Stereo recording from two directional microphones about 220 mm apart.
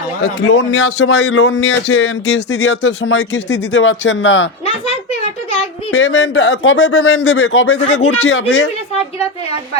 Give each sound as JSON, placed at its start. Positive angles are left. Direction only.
{"t": 0.4, "sound": "speech", "side_deg": 55}
{"t": 5.9, "sound": "speech", "side_deg": 55}